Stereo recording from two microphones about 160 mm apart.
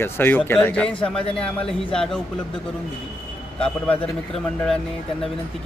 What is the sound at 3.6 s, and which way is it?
A man's voice, 5° left (ahead or behind).